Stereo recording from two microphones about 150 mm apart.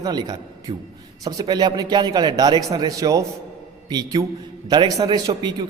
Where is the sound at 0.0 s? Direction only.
25° right (ahead or behind).